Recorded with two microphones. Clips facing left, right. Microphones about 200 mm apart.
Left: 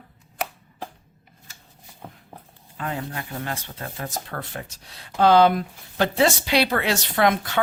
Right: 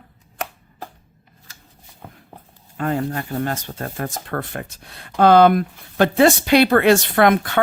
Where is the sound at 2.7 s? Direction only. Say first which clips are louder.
Right 8 dB; 45° right (ahead or behind).